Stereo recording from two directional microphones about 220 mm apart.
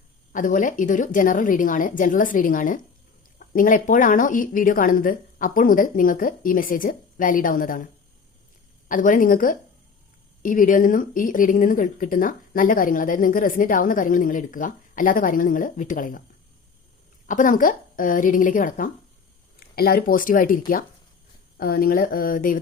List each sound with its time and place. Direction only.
0.3 s speech: 35° left (ahead or behind)
8.9 s speech: 40° left (ahead or behind)
17.2 s speech: 35° left (ahead or behind)